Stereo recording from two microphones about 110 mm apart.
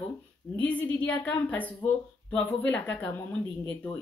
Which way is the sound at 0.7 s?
15° left (ahead or behind).